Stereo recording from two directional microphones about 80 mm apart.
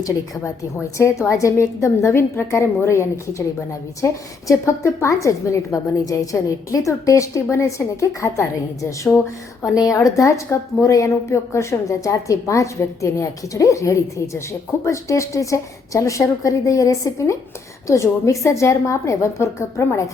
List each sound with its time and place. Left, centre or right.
0.9 s a woman's voice: left